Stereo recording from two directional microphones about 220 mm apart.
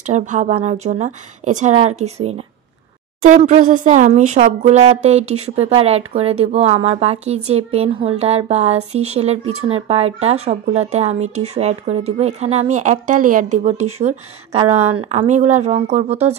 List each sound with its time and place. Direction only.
0.0 s speech: 35° right (ahead or behind)